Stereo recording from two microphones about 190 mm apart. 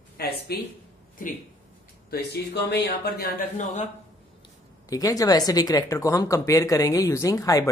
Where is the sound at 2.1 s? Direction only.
60° left (ahead or behind); by 3.9 s 40° left (ahead or behind).